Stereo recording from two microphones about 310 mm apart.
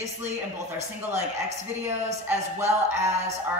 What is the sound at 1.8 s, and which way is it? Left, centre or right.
Speech, centre.